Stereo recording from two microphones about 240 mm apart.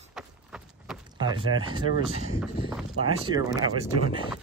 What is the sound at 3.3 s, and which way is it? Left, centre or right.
Speech, centre.